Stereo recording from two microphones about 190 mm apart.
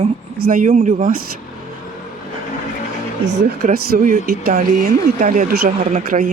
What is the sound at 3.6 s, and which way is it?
Speech, 50° right (ahead or behind).